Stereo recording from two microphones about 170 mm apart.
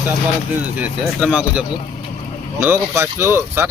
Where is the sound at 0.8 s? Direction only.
5° right (ahead or behind).